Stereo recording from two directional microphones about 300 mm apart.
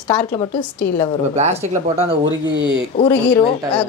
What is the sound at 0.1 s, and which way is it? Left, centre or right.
Speech, centre.